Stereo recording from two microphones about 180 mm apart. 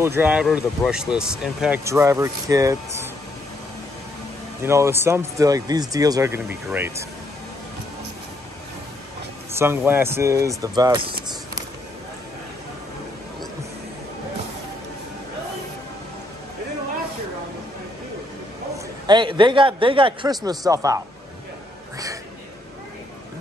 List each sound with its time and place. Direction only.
0.0 s speech: 10° right (ahead or behind)
1.9 s speech: 15° right (ahead or behind)
4.6 s speech: 15° right (ahead or behind)
9.5 s speech: 15° right (ahead or behind)
19.0 s a man's voice: 25° right (ahead or behind)
21.9 s a sound: 20° right (ahead or behind)